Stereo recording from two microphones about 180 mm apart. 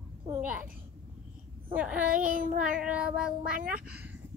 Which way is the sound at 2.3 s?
50° right (ahead or behind).